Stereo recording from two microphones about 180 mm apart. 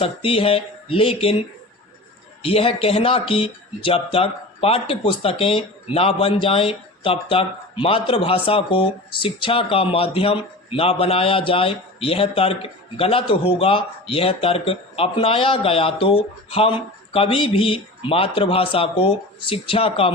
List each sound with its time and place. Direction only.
0.0 s speech: 30° left (ahead or behind)